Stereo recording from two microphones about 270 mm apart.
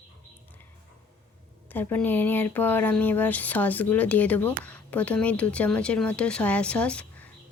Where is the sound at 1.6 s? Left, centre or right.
Centre.